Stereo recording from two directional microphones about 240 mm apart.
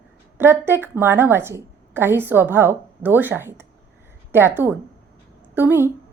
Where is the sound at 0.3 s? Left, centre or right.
Centre.